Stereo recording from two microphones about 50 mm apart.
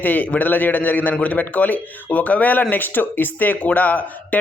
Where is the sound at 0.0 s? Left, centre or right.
Left.